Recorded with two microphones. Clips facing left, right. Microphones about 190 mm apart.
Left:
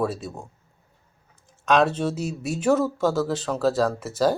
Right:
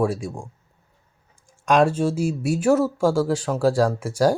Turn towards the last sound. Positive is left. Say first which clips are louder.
# right 2 dB
turn(degrees=-10)  # may be behind; listen again after turning